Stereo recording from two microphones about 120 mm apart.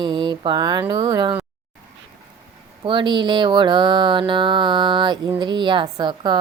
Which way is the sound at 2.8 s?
40° right (ahead or behind).